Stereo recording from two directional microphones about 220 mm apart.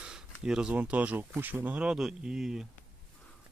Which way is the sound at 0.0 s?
5° right (ahead or behind).